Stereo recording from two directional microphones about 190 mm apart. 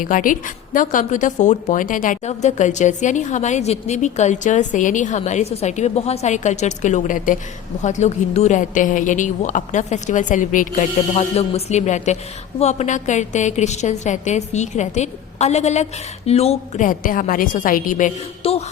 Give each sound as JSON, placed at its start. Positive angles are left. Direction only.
{"t": 0.0, "sound": "a woman's voice", "side_deg": 45}